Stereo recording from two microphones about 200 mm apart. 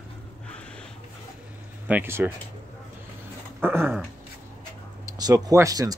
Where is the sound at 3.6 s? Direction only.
10° right (ahead or behind).